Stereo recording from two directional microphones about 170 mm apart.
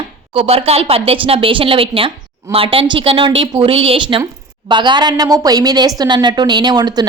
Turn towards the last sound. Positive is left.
turn(degrees=-25)  # may be behind; listen again after turning